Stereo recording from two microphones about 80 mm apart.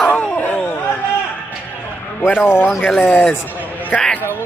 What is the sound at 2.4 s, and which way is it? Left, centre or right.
A man's voice, left.